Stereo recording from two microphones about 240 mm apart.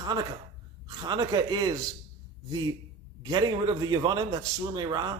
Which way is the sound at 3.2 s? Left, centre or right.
Centre.